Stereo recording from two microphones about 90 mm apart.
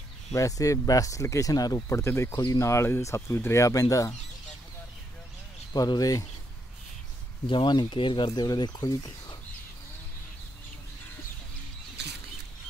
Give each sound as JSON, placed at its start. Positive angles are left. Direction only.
{"t": 0.3, "sound": "speech", "side_deg": 35}
{"t": 2.3, "sound": "speech", "side_deg": 45}
{"t": 2.7, "sound": "speech", "side_deg": 30}
{"t": 5.7, "sound": "speech", "side_deg": 45}
{"t": 7.4, "sound": "speech", "side_deg": 60}